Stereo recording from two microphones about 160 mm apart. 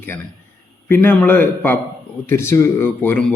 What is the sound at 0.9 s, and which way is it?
A man's voice, 10° left (ahead or behind).